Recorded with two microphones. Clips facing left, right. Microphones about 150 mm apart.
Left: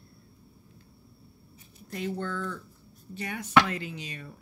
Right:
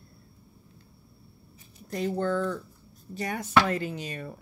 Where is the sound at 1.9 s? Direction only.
35° right (ahead or behind).